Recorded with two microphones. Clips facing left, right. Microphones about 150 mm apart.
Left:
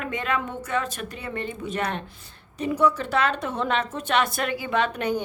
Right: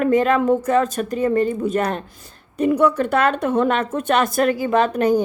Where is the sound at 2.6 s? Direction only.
55° right (ahead or behind).